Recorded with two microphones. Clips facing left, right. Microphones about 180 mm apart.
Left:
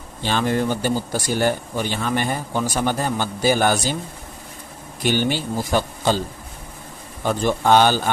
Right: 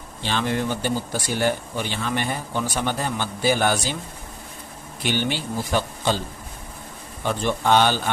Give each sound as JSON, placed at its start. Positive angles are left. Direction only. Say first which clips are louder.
{"t": 0.2, "sound": "speech", "louder": "left 4 dB", "side_deg": 45}
{"t": 5.0, "sound": "speech", "louder": "left 4 dB", "side_deg": 45}
{"t": 7.3, "sound": "speech", "louder": "left 3 dB", "side_deg": 45}